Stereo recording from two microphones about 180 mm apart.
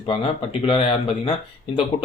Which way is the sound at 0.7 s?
30° left (ahead or behind).